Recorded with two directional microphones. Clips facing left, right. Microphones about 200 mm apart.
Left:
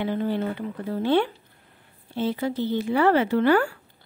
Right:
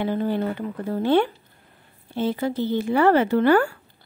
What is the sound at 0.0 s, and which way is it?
Speech, 40° right (ahead or behind).